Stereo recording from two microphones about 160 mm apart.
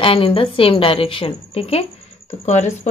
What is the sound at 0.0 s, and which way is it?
Speech, 35° left (ahead or behind).